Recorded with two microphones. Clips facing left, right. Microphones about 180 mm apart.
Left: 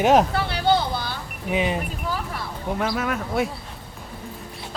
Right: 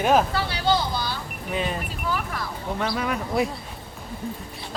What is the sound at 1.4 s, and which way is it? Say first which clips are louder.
Speech: left 4 dB; 15° left (ahead or behind).